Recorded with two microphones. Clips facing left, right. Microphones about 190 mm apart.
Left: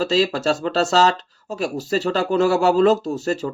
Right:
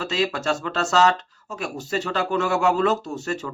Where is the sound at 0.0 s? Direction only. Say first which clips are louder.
Left 5 dB; 35° left (ahead or behind).